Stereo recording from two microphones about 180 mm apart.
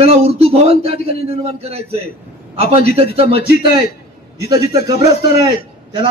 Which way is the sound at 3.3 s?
60° left (ahead or behind).